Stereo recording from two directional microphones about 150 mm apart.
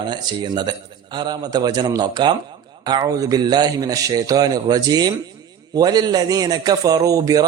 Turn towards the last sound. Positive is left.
turn(degrees=-25)  # may be behind; listen again after turning